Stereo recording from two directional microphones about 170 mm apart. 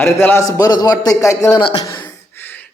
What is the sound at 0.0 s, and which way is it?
A man's voice, 15° left (ahead or behind).